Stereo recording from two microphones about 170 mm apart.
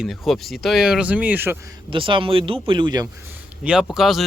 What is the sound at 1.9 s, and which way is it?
Speech, 30° right (ahead or behind).